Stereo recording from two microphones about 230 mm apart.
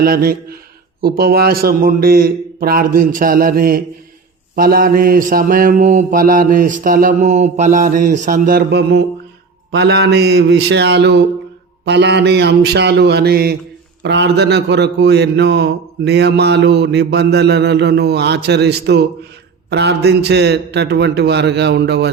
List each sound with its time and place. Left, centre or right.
0.0 s mantra: right
9.7 s a man's voice: right